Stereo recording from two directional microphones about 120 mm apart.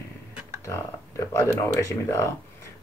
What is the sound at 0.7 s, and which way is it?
Speech, 25° left (ahead or behind).